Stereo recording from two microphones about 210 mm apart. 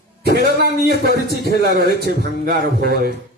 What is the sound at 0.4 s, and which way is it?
A man's voice, 50° right (ahead or behind).